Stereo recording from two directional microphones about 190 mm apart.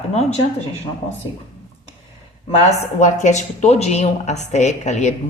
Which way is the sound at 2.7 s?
40° left (ahead or behind).